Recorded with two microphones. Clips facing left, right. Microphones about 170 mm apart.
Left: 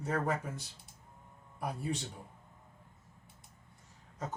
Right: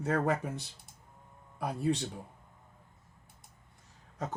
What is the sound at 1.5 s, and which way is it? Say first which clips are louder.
Speech: right 6 dB; 75° right (ahead or behind).